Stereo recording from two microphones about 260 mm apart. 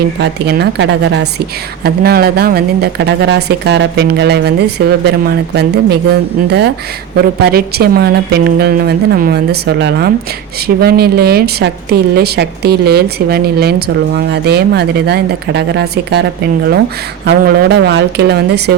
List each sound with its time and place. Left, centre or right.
0.2 s a woman's voice: right
7.4 s a woman's voice: right